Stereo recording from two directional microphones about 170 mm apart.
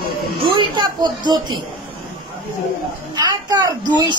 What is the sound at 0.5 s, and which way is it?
A woman's voice, 25° right (ahead or behind).